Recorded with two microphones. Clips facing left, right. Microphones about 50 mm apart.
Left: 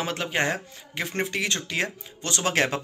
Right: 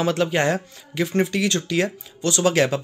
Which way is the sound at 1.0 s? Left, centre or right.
Left.